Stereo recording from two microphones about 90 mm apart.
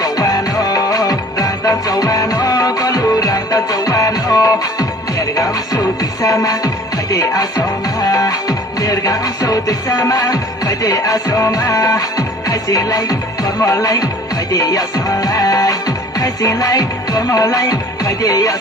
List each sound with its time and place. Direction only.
0.0 s music: 45° left (ahead or behind)